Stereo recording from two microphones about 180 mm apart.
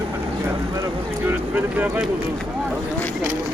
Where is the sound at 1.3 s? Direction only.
10° right (ahead or behind).